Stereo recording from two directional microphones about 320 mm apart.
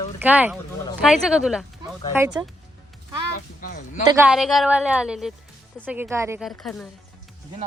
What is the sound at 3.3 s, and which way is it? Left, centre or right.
Speech, left.